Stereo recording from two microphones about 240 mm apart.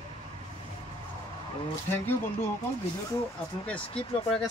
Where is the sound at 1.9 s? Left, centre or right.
Centre.